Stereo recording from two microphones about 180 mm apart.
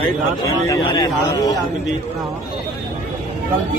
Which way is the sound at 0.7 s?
25° left (ahead or behind).